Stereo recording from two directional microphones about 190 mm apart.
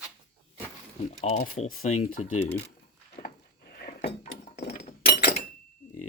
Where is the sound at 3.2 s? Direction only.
45° left (ahead or behind).